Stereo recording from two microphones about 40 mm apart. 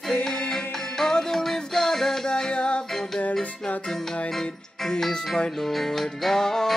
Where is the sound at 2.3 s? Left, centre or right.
Left.